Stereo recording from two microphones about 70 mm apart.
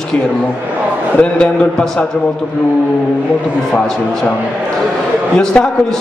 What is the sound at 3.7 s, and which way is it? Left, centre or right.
Speech, centre.